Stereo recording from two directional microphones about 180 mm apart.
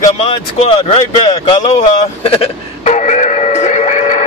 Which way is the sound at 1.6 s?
35° left (ahead or behind).